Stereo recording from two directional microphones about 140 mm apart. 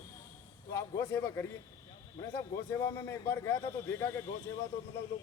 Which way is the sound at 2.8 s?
20° left (ahead or behind).